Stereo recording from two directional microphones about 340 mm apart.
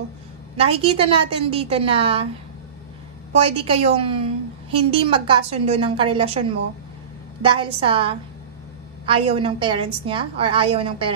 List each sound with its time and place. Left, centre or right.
0.6 s a woman's voice: centre
3.4 s a woman's voice: centre
7.4 s a woman's voice: centre